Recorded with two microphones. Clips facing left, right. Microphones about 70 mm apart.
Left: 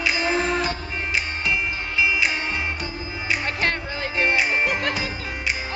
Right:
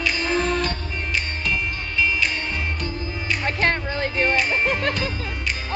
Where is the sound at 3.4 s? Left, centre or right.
Right.